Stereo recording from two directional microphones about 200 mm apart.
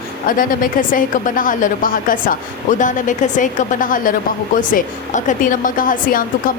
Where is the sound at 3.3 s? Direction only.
40° left (ahead or behind).